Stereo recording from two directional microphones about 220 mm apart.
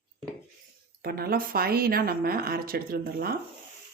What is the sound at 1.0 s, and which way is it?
Speech, 45° right (ahead or behind).